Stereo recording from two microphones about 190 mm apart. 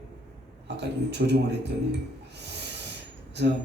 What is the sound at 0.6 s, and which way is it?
Speech, 65° right (ahead or behind).